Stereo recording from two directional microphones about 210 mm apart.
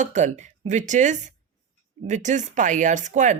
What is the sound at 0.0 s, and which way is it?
Speech, 35° right (ahead or behind).